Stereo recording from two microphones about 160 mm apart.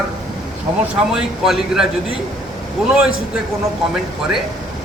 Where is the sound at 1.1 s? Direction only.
5° right (ahead or behind).